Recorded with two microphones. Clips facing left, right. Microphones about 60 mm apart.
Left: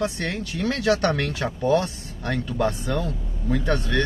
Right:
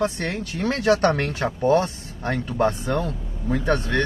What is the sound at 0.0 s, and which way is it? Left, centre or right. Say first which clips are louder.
Speech: right 2 dB; right.